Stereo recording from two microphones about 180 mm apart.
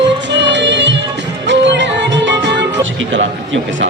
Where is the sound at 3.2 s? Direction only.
90° right.